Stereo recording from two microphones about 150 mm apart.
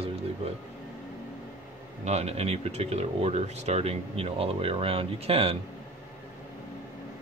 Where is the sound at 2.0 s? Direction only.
45° right (ahead or behind).